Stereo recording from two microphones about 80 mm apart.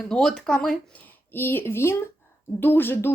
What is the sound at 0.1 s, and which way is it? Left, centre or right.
Speech, centre.